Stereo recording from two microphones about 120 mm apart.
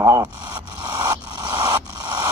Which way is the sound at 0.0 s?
25° right (ahead or behind).